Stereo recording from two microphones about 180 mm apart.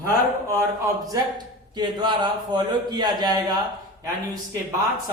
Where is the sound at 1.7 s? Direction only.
25° right (ahead or behind).